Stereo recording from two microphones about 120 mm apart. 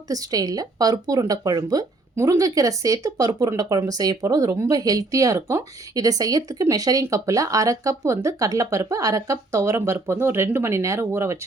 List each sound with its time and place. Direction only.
0.1 s speech: 30° right (ahead or behind)